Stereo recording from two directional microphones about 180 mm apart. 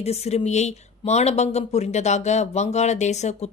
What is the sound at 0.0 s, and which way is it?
Speech, 35° left (ahead or behind).